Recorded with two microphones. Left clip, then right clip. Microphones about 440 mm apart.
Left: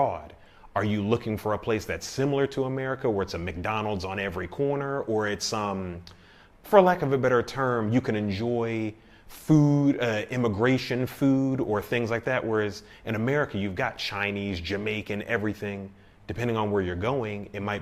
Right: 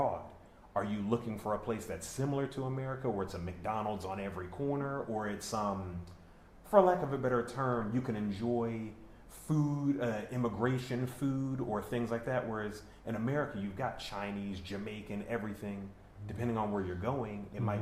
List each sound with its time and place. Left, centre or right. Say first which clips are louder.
0.7 s speech: left 8 dB; left
6.7 s speech: left 7 dB; left